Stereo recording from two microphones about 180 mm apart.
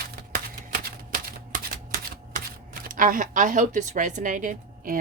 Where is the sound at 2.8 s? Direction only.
50° right (ahead or behind).